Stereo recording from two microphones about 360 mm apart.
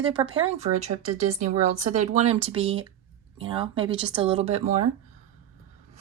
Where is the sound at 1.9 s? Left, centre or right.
Centre.